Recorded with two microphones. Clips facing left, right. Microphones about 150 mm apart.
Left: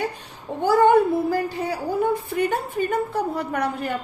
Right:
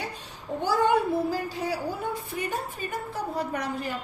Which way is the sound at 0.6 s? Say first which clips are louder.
Left 7 dB; 55° left (ahead or behind).